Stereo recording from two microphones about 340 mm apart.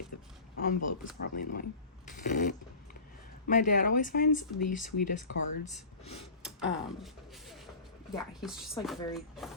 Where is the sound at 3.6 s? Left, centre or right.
Left.